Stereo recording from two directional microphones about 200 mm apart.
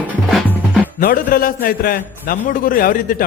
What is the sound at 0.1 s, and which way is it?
Music, centre (ahead or behind).